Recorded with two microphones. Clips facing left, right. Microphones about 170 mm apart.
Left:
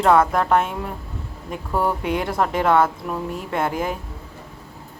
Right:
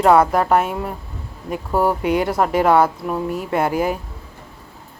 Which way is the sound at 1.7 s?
30° right (ahead or behind).